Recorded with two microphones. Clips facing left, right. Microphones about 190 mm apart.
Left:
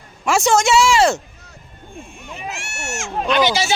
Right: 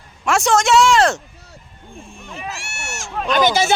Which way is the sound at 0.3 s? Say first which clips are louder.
Even; centre (ahead or behind).